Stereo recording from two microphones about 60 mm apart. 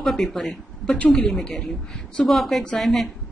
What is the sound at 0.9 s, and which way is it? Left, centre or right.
Speech, left.